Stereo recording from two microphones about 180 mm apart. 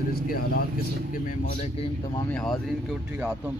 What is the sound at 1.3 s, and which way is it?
Speech, 40° left (ahead or behind).